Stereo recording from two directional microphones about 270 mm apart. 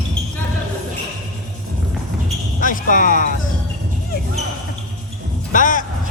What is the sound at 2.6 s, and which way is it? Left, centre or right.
Speech, left.